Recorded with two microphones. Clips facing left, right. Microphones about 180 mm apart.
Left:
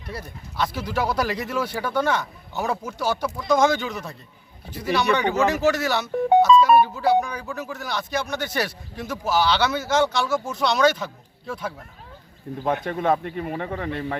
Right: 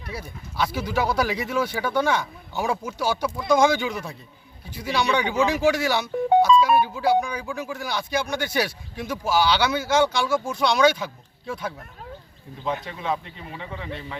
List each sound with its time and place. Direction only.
0.1 s speech: centre (ahead or behind)
12.6 s a man's voice: 55° left (ahead or behind)